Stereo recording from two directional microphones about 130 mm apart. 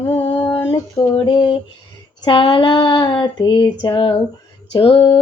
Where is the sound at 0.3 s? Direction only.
15° left (ahead or behind).